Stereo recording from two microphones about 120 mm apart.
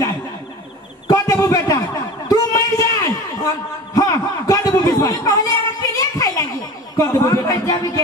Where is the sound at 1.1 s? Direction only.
25° left (ahead or behind).